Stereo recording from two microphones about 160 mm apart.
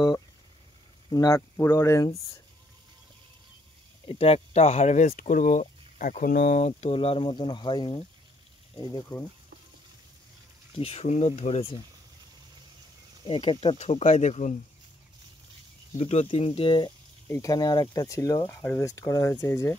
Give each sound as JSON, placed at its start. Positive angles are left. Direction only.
{"t": 1.1, "sound": "speech", "side_deg": 20}
{"t": 4.1, "sound": "speech", "side_deg": 40}
{"t": 9.1, "sound": "speech", "side_deg": 25}
{"t": 10.8, "sound": "speech", "side_deg": 40}
{"t": 13.2, "sound": "speech", "side_deg": 30}
{"t": 16.0, "sound": "speech", "side_deg": 40}